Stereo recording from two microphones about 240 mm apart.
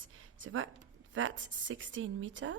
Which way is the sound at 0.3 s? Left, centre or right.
Right.